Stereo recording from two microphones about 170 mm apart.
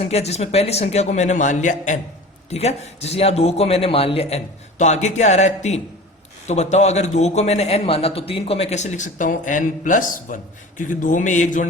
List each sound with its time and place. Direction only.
0.0 s a man's voice: 40° left (ahead or behind)